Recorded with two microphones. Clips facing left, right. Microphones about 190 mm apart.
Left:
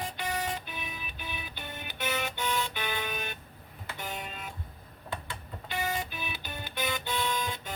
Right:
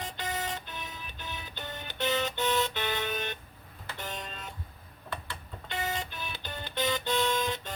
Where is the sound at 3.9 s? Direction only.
10° left (ahead or behind).